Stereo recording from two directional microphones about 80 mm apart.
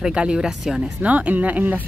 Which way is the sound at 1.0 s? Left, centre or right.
Centre.